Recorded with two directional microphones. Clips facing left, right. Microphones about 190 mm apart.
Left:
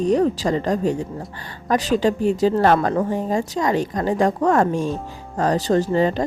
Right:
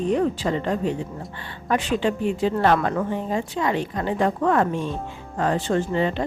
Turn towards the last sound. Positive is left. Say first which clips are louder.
# left 4 dB
turn(degrees=40)  # may be behind; listen again after turning